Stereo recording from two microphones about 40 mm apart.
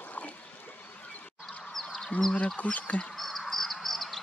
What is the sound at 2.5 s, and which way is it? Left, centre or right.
Speech, left.